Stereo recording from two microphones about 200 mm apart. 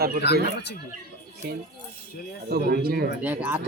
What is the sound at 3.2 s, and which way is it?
Speech, 10° right (ahead or behind).